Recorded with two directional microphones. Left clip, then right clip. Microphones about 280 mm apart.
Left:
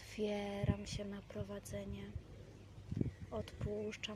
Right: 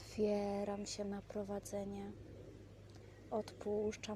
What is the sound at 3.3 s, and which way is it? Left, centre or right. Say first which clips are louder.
Speech: right 4 dB; centre.